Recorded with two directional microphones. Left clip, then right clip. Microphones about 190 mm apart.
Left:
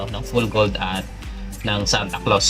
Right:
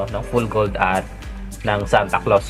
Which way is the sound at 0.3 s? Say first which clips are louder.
Even; 10° left (ahead or behind).